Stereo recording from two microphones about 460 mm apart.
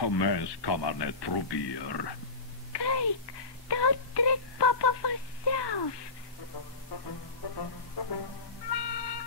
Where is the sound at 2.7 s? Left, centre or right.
Left.